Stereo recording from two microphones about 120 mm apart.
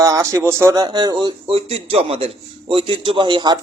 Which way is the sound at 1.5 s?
55° right (ahead or behind).